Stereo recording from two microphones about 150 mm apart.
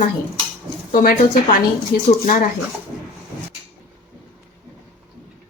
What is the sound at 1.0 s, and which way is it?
A woman's voice, 75° left (ahead or behind).